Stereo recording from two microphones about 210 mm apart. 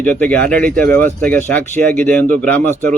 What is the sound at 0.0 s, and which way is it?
Speech, 5° left (ahead or behind).